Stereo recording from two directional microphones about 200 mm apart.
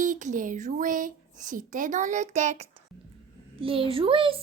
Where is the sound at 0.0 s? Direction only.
40° right (ahead or behind).